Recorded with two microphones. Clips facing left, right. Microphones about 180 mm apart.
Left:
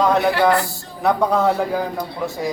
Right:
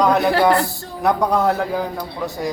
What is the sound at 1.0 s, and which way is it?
Speech, centre (ahead or behind).